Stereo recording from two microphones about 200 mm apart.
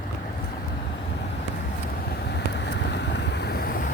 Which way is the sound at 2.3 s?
60° left (ahead or behind).